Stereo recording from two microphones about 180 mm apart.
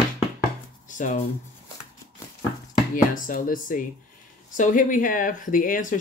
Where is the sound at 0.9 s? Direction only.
45° left (ahead or behind).